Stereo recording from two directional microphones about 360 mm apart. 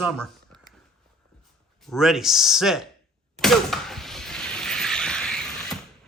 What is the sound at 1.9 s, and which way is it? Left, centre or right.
Speech, centre.